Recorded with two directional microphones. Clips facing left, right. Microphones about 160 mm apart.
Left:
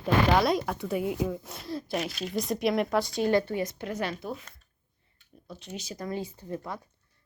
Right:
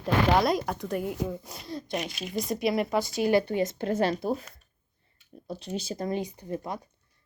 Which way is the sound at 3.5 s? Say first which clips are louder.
Right 5 dB; 30° right (ahead or behind).